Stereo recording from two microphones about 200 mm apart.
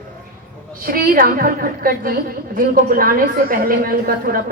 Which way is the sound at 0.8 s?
45° right (ahead or behind).